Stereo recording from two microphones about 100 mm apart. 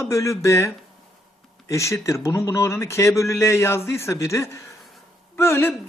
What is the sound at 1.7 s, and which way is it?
Speech, 30° left (ahead or behind).